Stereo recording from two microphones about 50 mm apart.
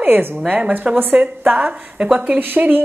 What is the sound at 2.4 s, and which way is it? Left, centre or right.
Speech, right.